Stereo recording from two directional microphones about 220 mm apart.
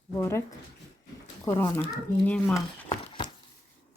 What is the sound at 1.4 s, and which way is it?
Speech, 10° left (ahead or behind).